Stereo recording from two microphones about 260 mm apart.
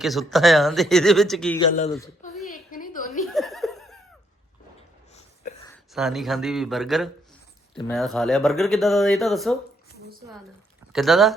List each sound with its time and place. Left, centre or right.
0.0 s speech: centre
1.5 s a man's voice: centre
2.5 s a sound: left
3.3 s laughter: centre
5.9 s speech: centre
10.9 s speech: centre